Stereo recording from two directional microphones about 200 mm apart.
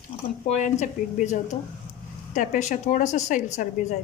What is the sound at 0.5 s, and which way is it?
A woman's voice, 35° left (ahead or behind).